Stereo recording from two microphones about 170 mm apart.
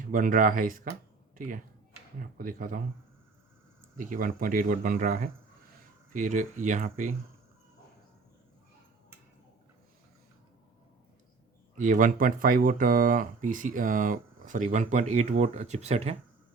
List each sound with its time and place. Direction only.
0.0 s speech: 55° right (ahead or behind)
3.9 s speech: 55° right (ahead or behind)
11.8 s speech: 50° right (ahead or behind)